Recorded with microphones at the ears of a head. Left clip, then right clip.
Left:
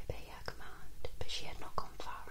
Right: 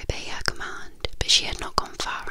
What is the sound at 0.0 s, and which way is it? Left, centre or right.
Whispering, right.